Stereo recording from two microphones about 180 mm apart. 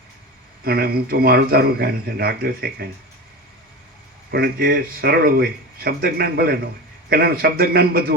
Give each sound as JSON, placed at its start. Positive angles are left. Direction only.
{"t": 0.6, "sound": "speech", "side_deg": -60}
{"t": 4.3, "sound": "speech", "side_deg": -55}